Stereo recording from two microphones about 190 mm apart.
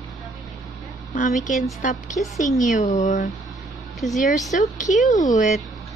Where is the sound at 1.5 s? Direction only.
40° left (ahead or behind).